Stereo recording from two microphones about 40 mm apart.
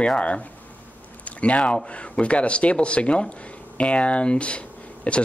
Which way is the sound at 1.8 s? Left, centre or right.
Left.